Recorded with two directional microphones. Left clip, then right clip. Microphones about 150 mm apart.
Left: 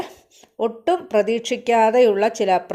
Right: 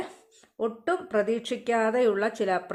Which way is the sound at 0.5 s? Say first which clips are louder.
Left 8 dB; 25° left (ahead or behind).